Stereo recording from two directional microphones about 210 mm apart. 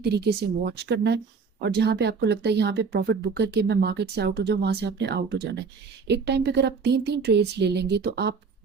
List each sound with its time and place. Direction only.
0.0 s speech: 50° right (ahead or behind)